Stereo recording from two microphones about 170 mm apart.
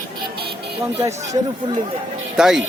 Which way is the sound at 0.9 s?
15° right (ahead or behind).